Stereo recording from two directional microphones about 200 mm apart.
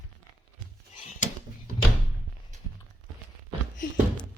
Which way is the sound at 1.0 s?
35° left (ahead or behind).